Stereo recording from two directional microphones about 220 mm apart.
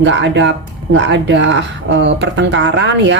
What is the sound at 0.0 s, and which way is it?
Speech, 55° right (ahead or behind).